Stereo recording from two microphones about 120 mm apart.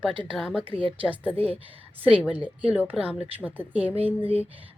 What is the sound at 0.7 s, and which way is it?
Speech, 45° right (ahead or behind).